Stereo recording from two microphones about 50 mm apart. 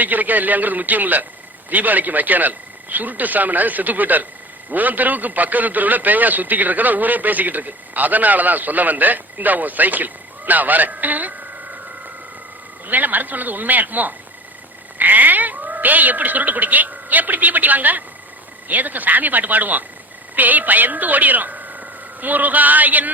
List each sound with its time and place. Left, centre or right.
0.0 s a man's voice: right
12.9 s a man's voice: right